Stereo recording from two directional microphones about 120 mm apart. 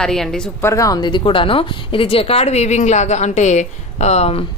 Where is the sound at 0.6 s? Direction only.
25° left (ahead or behind).